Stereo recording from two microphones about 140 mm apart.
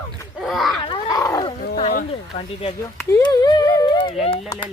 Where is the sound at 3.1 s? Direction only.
30° left (ahead or behind).